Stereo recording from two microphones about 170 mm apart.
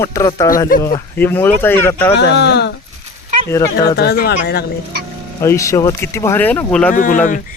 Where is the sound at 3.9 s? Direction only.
70° left (ahead or behind).